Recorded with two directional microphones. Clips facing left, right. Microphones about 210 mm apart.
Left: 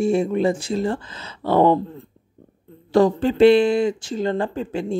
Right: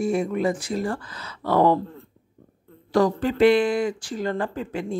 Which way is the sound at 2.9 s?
25° left (ahead or behind).